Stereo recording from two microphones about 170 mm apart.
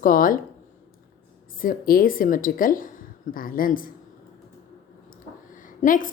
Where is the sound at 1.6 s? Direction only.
60° left (ahead or behind).